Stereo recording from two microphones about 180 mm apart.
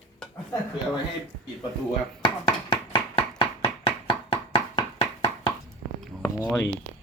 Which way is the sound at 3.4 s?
30° left (ahead or behind).